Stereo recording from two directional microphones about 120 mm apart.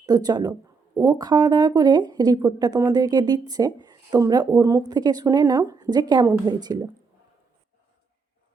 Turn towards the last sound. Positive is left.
turn(degrees=-35)  # may be behind; listen again after turning